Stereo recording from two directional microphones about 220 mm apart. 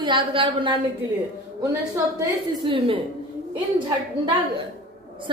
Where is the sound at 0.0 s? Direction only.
20° right (ahead or behind).